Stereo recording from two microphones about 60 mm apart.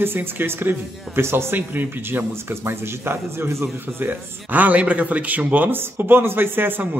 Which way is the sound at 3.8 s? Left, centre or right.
Right.